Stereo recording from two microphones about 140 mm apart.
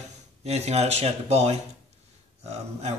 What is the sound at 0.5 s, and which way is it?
Speech, 50° right (ahead or behind).